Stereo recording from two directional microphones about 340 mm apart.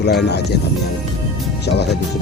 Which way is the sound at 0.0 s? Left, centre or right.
Left.